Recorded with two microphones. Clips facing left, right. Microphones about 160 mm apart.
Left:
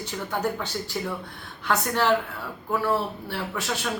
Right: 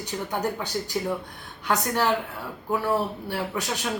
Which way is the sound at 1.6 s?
15° right (ahead or behind).